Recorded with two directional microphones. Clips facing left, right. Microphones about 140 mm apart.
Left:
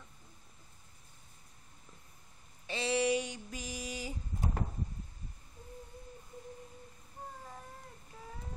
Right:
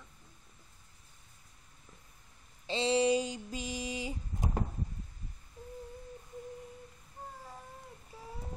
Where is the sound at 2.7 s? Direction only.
25° right (ahead or behind).